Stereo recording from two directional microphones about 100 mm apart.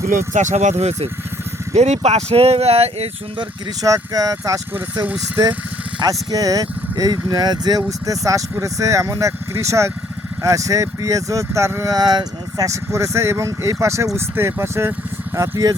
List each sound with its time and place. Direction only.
0.5 s speech: 90° right
3.8 s speech: 35° right (ahead or behind)
6.1 s speech: 35° right (ahead or behind)
15.4 s speech: 35° right (ahead or behind)